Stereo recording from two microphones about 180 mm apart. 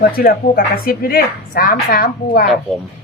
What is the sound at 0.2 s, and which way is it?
A woman's voice, 55° left (ahead or behind).